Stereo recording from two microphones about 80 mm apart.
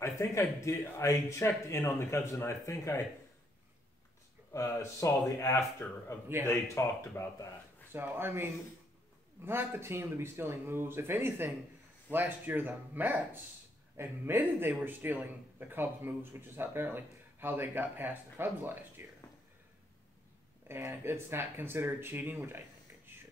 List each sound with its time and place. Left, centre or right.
0.0 s speech: left
4.5 s speech: left
5.8 s speech: centre
6.4 s speech: left
7.9 s speech: right
20.6 s speech: right